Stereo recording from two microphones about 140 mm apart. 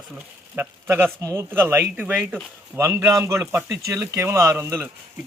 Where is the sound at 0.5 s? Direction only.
15° right (ahead or behind).